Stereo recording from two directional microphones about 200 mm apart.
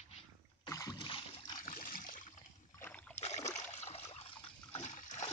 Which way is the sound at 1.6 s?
40° left (ahead or behind).